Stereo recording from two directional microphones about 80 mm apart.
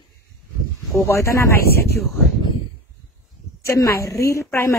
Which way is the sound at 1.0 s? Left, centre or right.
Left.